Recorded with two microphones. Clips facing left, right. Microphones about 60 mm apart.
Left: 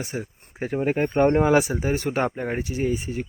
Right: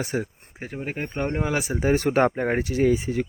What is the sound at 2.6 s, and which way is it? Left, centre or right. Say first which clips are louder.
Speech: right 5 dB; right.